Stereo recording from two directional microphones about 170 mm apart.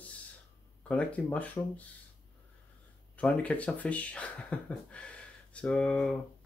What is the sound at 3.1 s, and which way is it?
Speech, 10° left (ahead or behind).